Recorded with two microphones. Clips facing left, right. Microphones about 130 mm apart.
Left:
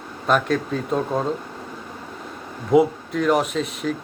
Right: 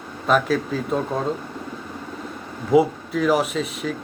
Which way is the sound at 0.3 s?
Centre (ahead or behind).